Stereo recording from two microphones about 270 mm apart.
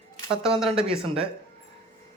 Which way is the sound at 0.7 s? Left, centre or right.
Right.